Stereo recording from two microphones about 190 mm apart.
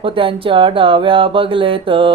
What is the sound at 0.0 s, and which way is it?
Mantra, 25° right (ahead or behind).